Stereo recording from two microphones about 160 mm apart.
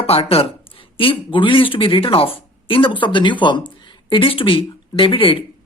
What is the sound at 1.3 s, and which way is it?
Speech, 30° left (ahead or behind).